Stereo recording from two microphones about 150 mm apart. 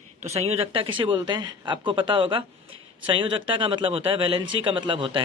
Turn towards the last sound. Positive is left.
turn(degrees=-35)  # may be behind; listen again after turning